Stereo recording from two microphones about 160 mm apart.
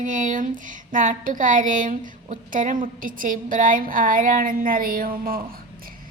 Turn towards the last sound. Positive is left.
turn(degrees=-65)  # may be behind; listen again after turning